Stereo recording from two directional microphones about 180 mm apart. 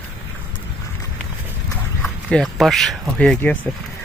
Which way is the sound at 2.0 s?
Centre (ahead or behind).